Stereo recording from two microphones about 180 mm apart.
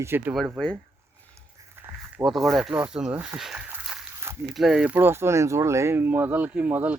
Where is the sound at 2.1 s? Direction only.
Centre (ahead or behind).